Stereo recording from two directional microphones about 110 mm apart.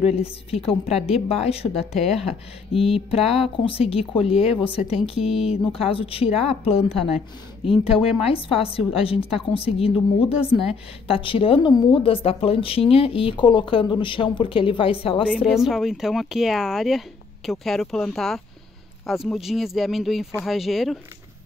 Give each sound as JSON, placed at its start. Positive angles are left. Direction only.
{"t": 0.0, "sound": "a woman's voice", "side_deg": 65}
{"t": 2.0, "sound": "speech", "side_deg": 85}
{"t": 2.7, "sound": "a woman's voice", "side_deg": 60}
{"t": 11.7, "sound": "a woman's voice", "side_deg": 35}
{"t": 12.0, "sound": "speech", "side_deg": 55}
{"t": 15.2, "sound": "speech", "side_deg": -5}